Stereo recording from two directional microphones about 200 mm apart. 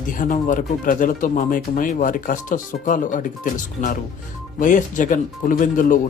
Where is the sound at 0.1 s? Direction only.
40° left (ahead or behind).